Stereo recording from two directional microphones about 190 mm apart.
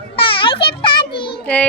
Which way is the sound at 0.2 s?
25° left (ahead or behind).